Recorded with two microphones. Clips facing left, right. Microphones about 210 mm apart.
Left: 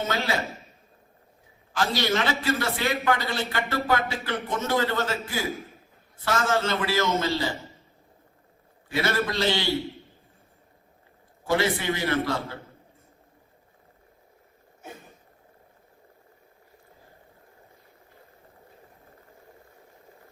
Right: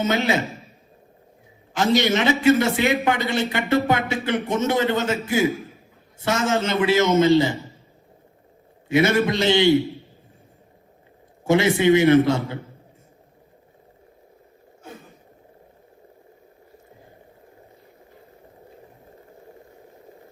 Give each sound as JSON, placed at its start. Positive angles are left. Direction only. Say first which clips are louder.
{"t": 0.1, "sound": "a man's voice", "louder": "right 6 dB", "side_deg": -20}
{"t": 1.7, "sound": "a man's voice", "louder": "right 6 dB", "side_deg": -20}
{"t": 8.9, "sound": "a man's voice", "louder": "right 8 dB", "side_deg": -20}
{"t": 11.4, "sound": "a man's voice", "louder": "right 8 dB", "side_deg": -20}